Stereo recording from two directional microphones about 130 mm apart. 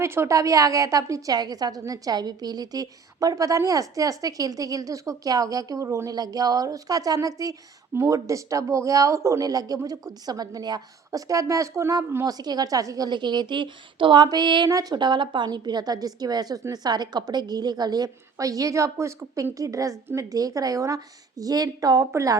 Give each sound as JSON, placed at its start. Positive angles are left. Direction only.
{"t": 0.0, "sound": "a woman's voice", "side_deg": -20}